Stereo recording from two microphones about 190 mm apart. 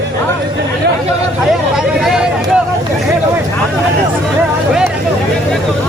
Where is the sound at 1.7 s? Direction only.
Centre (ahead or behind).